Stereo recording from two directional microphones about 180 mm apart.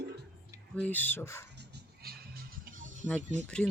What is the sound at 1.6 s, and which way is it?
Music, 65° right (ahead or behind).